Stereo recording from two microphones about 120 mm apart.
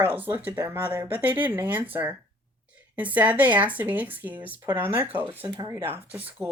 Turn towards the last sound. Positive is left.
turn(degrees=-15)  # may be behind; listen again after turning